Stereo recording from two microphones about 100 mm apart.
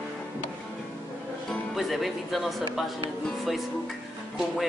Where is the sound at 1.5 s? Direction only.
Centre (ahead or behind).